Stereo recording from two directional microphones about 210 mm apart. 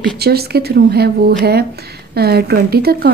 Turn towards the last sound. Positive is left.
turn(degrees=-50)  # may be behind; listen again after turning